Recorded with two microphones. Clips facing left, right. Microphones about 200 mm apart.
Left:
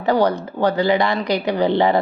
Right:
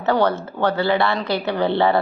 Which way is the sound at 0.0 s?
15° left (ahead or behind).